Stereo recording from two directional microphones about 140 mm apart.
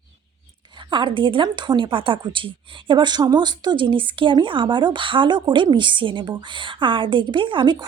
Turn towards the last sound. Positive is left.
turn(degrees=-35)  # may be behind; listen again after turning